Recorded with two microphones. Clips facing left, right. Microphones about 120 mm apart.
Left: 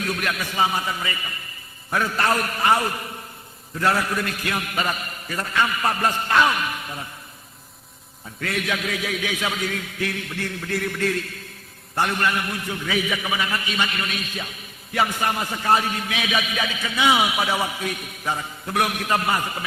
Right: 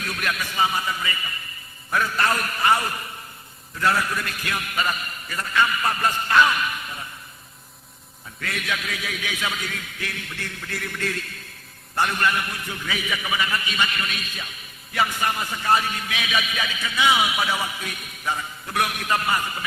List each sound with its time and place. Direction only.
0.0 s a man's voice: 30° left (ahead or behind)
8.4 s a man's voice: 35° left (ahead or behind)
11.9 s a man's voice: 35° left (ahead or behind)